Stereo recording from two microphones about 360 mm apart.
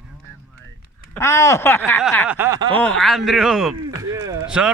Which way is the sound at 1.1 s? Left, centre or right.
Centre.